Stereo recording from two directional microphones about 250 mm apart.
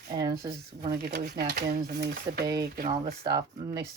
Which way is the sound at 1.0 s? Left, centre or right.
Right.